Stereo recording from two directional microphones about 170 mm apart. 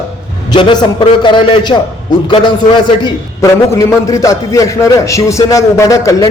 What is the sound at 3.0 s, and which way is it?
Speech, 20° left (ahead or behind).